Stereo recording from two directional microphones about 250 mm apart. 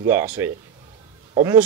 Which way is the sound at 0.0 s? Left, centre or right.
Centre.